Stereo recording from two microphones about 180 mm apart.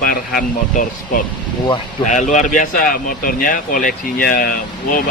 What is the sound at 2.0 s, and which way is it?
Speech, 45° left (ahead or behind).